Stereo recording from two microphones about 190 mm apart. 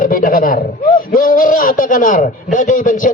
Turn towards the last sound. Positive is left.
turn(degrees=45)  # may be behind; listen again after turning